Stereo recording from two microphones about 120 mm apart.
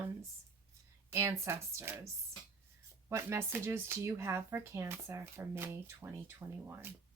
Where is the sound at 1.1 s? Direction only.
25° right (ahead or behind).